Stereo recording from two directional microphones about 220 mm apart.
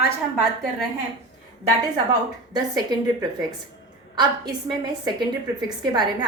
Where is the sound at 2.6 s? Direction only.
20° right (ahead or behind).